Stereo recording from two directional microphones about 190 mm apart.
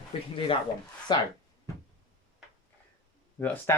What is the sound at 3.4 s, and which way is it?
Speech, 10° left (ahead or behind).